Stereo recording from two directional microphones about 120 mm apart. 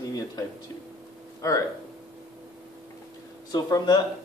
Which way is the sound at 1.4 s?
25° left (ahead or behind).